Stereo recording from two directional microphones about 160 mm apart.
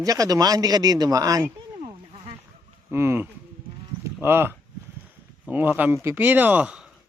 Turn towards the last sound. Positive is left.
turn(degrees=-5)  # may be behind; listen again after turning